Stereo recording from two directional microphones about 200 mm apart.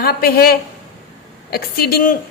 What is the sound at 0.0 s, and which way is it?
A woman's voice, 50° left (ahead or behind).